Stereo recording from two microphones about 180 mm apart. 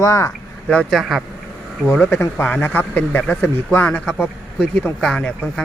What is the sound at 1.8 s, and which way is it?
Speech, 15° left (ahead or behind).